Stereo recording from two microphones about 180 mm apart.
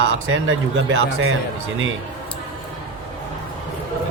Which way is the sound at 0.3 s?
90° right.